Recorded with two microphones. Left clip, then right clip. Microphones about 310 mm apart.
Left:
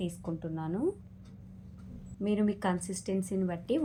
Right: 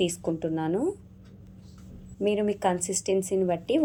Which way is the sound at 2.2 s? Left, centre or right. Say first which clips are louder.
Right 7 dB; right.